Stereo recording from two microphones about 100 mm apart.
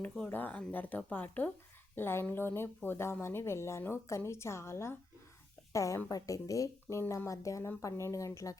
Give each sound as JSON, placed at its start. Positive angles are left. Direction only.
{"t": 0.0, "sound": "a woman's voice", "side_deg": 15}